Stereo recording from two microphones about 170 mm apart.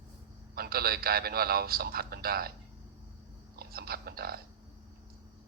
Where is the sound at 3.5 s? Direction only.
65° right (ahead or behind).